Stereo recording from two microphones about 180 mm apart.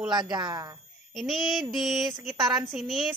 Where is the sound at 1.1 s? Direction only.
Centre (ahead or behind).